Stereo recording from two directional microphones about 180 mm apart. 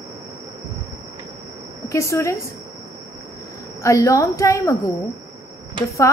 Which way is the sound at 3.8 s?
15° left (ahead or behind).